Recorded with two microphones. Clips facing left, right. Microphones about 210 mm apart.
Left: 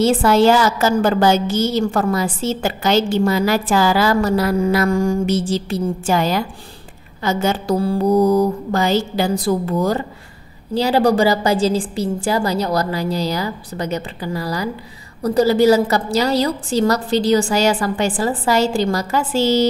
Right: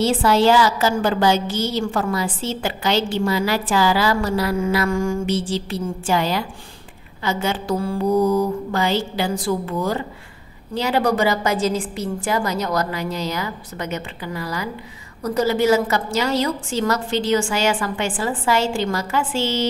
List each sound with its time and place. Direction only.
0.0 s a woman's voice: 45° left (ahead or behind)